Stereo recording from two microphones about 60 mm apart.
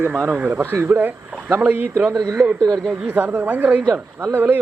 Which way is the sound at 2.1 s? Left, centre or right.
Right.